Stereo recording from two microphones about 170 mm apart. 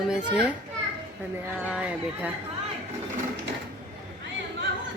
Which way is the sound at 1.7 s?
5° right (ahead or behind).